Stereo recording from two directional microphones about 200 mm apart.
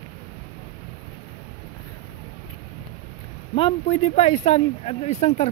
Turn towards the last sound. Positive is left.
turn(degrees=35)  # may be behind; listen again after turning